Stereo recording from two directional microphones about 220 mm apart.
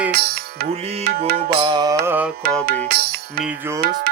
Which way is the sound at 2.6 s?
40° right (ahead or behind).